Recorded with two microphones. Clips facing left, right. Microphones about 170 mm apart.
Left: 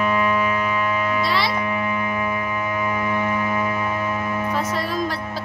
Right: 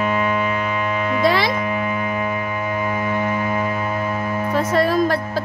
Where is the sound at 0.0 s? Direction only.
30° right (ahead or behind).